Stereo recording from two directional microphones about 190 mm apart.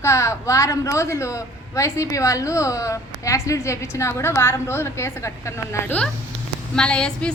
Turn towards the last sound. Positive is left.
turn(degrees=5)  # may be behind; listen again after turning